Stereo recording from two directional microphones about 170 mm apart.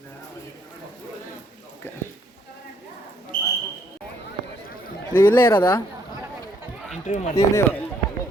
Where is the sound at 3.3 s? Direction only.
60° left (ahead or behind).